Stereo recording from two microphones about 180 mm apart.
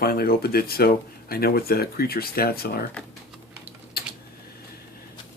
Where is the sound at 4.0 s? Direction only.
60° left (ahead or behind).